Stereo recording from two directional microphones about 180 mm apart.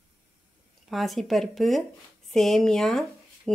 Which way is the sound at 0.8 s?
Centre (ahead or behind).